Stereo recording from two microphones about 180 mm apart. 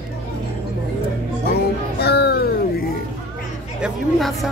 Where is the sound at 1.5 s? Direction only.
60° left (ahead or behind).